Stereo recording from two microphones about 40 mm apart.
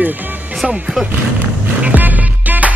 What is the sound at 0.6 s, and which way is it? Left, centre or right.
Speech, centre.